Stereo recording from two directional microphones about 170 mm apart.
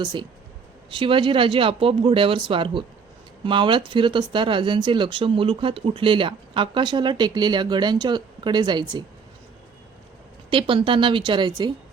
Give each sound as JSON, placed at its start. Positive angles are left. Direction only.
{"t": 0.0, "sound": "speech", "side_deg": -25}
{"t": 10.5, "sound": "speech", "side_deg": -30}